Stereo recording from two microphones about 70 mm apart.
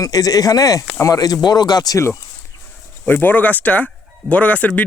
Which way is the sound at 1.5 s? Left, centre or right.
Left.